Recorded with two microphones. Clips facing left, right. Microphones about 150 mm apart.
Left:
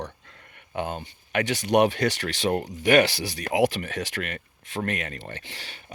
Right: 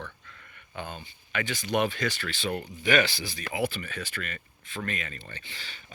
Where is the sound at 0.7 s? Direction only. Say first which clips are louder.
Left 8 dB; 70° left (ahead or behind).